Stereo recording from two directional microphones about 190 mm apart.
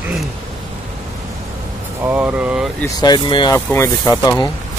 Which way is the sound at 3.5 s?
10° left (ahead or behind).